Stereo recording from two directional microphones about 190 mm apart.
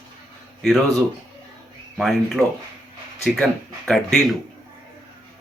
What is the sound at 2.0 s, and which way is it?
Speech, centre (ahead or behind).